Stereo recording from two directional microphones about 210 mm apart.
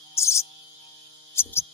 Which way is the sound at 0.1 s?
15° left (ahead or behind).